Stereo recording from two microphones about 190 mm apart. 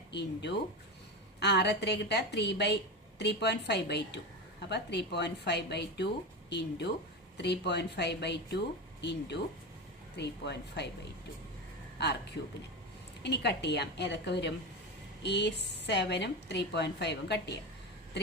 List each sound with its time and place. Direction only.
0.1 s speech: 65° left (ahead or behind)
13.2 s speech: 60° left (ahead or behind)